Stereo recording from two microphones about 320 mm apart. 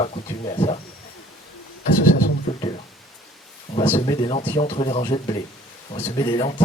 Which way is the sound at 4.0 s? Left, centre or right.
Centre.